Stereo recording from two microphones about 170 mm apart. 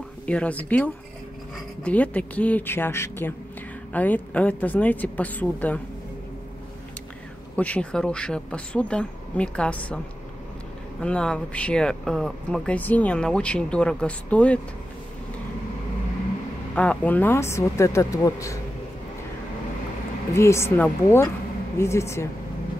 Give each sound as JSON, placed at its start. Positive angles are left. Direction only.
{"t": 0.3, "sound": "speech", "side_deg": 10}
{"t": 7.5, "sound": "speech", "side_deg": 10}
{"t": 11.0, "sound": "speech", "side_deg": 5}
{"t": 16.7, "sound": "speech", "side_deg": 10}
{"t": 20.3, "sound": "speech", "side_deg": 15}